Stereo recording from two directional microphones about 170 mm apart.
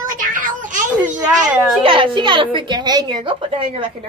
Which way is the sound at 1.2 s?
10° right (ahead or behind).